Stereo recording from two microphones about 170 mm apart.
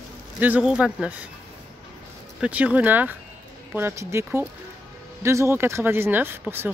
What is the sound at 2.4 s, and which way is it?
Speech, 10° right (ahead or behind).